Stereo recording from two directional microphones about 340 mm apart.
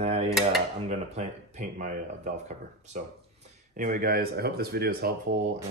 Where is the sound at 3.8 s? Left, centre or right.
Right.